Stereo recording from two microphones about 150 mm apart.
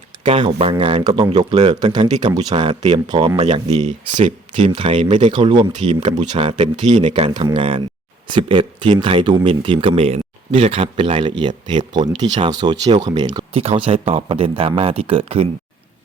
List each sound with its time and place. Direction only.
0.2 s speech: 35° right (ahead or behind)
3.4 s speech: 50° right (ahead or behind)
4.2 s speech: 35° right (ahead or behind)